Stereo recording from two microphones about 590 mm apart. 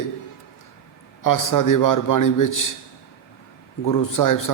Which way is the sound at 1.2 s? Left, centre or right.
Left.